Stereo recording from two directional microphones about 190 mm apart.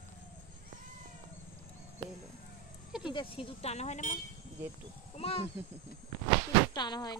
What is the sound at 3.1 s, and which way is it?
Speech, 25° left (ahead or behind).